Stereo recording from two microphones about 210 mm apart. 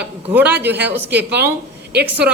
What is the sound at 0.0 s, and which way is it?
A man's voice, 10° right (ahead or behind).